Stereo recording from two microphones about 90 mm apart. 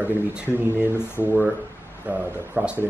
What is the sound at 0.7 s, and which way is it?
A man's voice, 25° right (ahead or behind).